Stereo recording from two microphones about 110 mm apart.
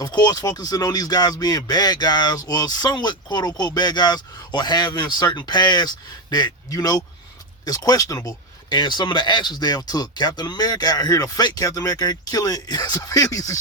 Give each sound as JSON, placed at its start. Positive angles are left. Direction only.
{"t": 0.0, "sound": "speech", "side_deg": 40}
{"t": 8.7, "sound": "speech", "side_deg": 40}